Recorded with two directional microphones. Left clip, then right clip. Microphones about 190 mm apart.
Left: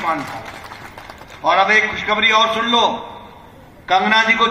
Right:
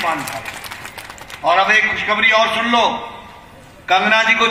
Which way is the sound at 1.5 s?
30° right (ahead or behind).